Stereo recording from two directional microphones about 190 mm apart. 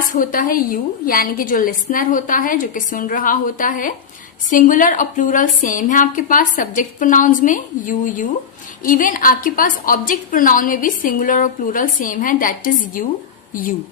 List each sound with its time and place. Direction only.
0.1 s a woman's voice: 45° left (ahead or behind)